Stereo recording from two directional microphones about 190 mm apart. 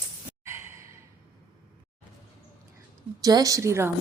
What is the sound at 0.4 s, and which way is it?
Sigh, 15° right (ahead or behind).